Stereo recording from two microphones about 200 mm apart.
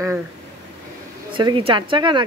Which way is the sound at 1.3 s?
25° right (ahead or behind).